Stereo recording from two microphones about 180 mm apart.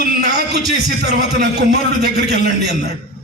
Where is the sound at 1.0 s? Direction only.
70° right (ahead or behind).